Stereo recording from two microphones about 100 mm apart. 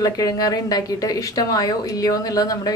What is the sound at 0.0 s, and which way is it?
A woman's voice, 35° left (ahead or behind).